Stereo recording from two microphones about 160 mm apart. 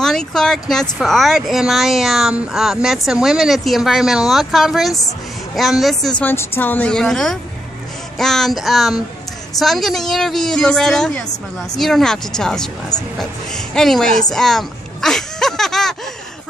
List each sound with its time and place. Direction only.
0.0 s speech: 5° left (ahead or behind)
13.7 s speech: centre (ahead or behind)